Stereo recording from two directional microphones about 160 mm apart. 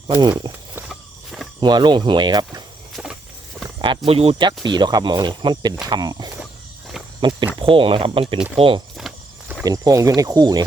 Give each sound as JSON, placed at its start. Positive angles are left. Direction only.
{"t": 0.2, "sound": "speech", "side_deg": -30}
{"t": 0.8, "sound": "walk", "side_deg": -5}
{"t": 1.6, "sound": "speech", "side_deg": -30}
{"t": 2.9, "sound": "a sound", "side_deg": -5}
{"t": 3.8, "sound": "speech", "side_deg": -35}
{"t": 9.0, "sound": "walk", "side_deg": -5}
{"t": 9.6, "sound": "speech", "side_deg": -25}